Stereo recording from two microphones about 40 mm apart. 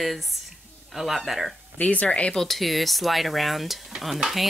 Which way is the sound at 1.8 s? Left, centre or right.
Left.